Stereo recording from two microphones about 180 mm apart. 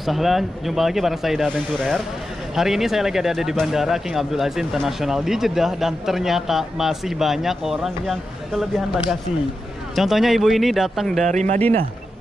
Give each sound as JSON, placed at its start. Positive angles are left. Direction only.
{"t": 0.0, "sound": "speech", "side_deg": 0}
{"t": 11.2, "sound": "speech", "side_deg": -40}